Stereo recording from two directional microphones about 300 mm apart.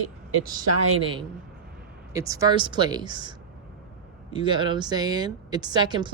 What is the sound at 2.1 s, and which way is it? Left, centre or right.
Speech, centre.